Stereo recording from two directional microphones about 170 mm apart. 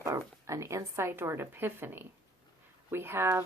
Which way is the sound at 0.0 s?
20° right (ahead or behind).